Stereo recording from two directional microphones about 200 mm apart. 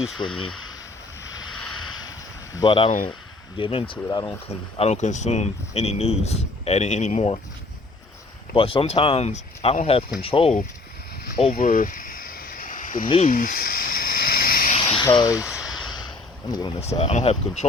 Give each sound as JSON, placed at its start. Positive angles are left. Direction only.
{"t": 0.2, "sound": "speech", "side_deg": 25}
{"t": 1.2, "sound": "a sound", "side_deg": 75}
{"t": 2.6, "sound": "speech", "side_deg": 25}
{"t": 4.8, "sound": "speech", "side_deg": 35}
{"t": 8.5, "sound": "speech", "side_deg": 30}
{"t": 11.3, "sound": "a sound", "side_deg": 40}
{"t": 15.2, "sound": "speech", "side_deg": 15}
{"t": 15.4, "sound": "a sound", "side_deg": 0}
{"t": 16.5, "sound": "speech", "side_deg": 20}
{"t": 16.8, "sound": "speech", "side_deg": 30}